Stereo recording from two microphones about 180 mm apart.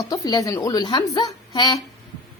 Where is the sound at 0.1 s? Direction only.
20° left (ahead or behind).